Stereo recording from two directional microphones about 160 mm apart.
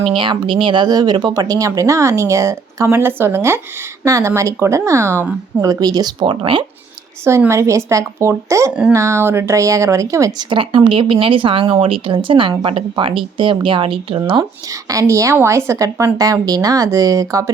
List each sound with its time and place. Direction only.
0.0 s a woman's voice: 30° right (ahead or behind); by 5.6 s 15° right (ahead or behind)
5.6 s speech: 25° right (ahead or behind)
7.3 s a woman's voice: 15° right (ahead or behind)